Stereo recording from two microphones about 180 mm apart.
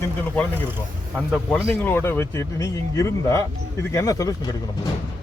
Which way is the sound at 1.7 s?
10° left (ahead or behind).